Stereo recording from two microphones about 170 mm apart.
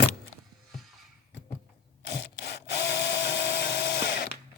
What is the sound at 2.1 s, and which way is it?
Wood, 90° left.